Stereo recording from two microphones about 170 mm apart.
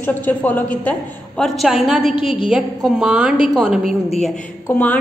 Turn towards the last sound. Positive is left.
turn(degrees=10)  # may be behind; listen again after turning